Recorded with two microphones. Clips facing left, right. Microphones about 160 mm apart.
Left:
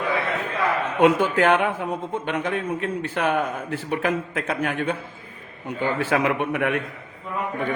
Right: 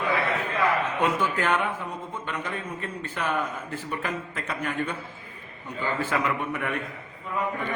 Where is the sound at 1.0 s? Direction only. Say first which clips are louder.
Left 10 dB; 70° left (ahead or behind).